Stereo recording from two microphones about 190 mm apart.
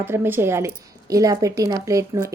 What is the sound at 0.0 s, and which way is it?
Speech, 10° right (ahead or behind).